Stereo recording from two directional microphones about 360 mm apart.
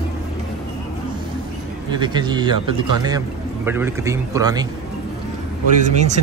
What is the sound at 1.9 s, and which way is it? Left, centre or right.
A man's voice, centre.